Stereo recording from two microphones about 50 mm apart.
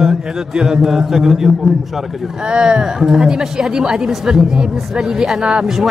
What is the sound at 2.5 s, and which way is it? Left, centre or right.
A woman's voice, centre.